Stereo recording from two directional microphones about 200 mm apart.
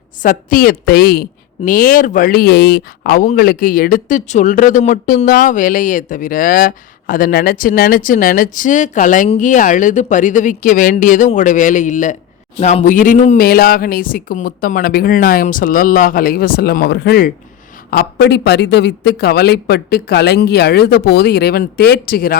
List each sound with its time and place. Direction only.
0.2 s a woman's voice: 45° left (ahead or behind)